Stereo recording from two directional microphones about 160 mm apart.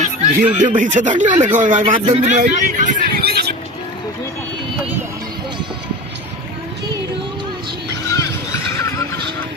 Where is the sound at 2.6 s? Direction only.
55° right (ahead or behind); by 3.5 s 85° right.